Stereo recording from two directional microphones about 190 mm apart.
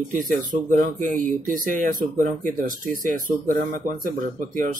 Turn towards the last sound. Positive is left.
turn(degrees=-45)  # may be behind; listen again after turning